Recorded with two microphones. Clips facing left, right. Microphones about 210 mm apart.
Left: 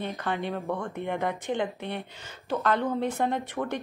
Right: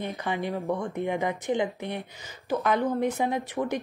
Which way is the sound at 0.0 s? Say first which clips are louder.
Right 1 dB; 15° right (ahead or behind).